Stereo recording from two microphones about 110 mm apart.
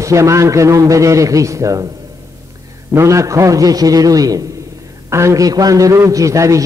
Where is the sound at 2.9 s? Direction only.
25° right (ahead or behind).